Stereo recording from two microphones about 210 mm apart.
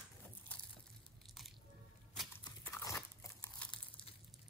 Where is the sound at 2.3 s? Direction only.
10° left (ahead or behind).